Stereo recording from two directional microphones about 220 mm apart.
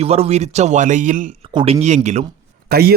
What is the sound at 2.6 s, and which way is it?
Speech, 45° right (ahead or behind).